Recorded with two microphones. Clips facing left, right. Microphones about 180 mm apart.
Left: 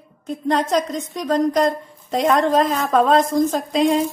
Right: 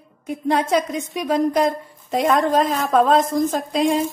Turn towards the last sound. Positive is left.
turn(degrees=0)  # may be behind; listen again after turning